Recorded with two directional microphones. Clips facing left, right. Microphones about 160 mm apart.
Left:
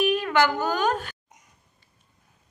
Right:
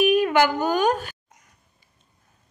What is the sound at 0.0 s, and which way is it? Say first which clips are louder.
Speech: right 4 dB; 15° right (ahead or behind).